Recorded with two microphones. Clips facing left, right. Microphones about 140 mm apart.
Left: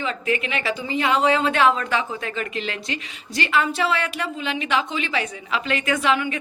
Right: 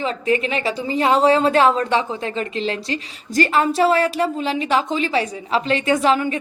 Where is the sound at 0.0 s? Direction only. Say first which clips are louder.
Right 4 dB; 35° right (ahead or behind).